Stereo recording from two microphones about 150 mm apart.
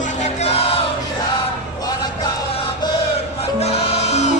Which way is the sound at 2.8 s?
30° left (ahead or behind).